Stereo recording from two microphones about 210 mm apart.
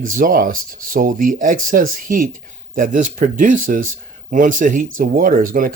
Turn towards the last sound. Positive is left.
turn(degrees=-40)  # may be behind; listen again after turning